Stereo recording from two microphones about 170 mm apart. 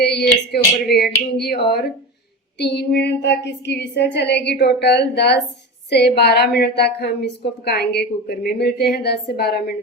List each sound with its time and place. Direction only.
0.0 s a woman's voice: 70° left (ahead or behind)
2.6 s a sound: 80° left
4.6 s a woman's voice: 80° left